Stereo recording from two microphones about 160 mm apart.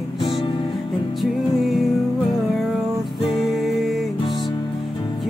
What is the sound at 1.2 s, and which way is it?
Music, centre (ahead or behind).